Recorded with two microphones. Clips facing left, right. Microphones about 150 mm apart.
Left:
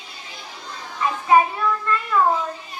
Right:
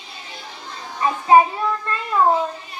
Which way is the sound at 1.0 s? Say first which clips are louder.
Right 3 dB; 30° right (ahead or behind).